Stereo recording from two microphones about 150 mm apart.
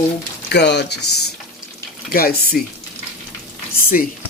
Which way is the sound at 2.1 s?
90° left.